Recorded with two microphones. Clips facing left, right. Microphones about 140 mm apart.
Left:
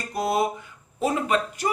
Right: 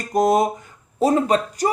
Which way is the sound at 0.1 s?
45° right (ahead or behind).